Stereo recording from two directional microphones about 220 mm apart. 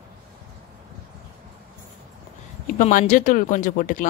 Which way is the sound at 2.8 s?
35° left (ahead or behind).